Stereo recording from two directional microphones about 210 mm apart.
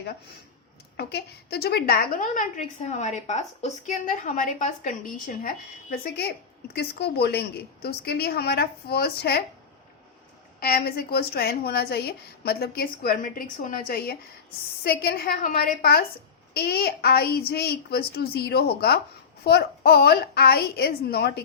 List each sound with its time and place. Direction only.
0.9 s a woman's voice: 50° left (ahead or behind)
10.6 s a woman's voice: 45° left (ahead or behind)